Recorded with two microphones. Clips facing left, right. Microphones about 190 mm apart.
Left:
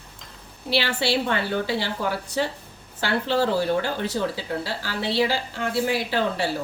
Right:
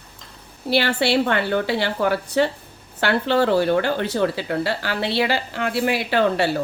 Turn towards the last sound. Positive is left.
turn(degrees=-65)  # may be behind; listen again after turning